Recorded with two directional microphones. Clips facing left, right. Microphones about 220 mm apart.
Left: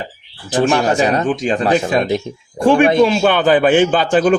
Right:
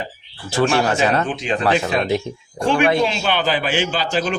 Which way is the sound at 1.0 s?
15° left (ahead or behind).